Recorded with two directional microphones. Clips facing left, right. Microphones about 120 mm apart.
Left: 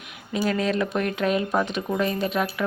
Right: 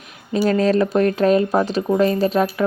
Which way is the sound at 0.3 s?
40° right (ahead or behind).